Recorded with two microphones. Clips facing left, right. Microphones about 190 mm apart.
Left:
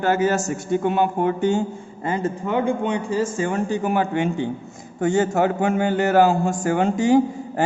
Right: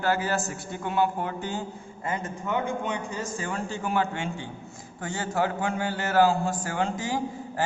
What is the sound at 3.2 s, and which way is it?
A man's voice, 20° left (ahead or behind).